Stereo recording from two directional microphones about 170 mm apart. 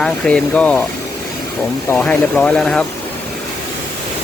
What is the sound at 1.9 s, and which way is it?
Speech, 10° left (ahead or behind).